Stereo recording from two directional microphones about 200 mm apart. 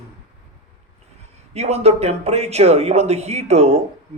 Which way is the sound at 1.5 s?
30° right (ahead or behind).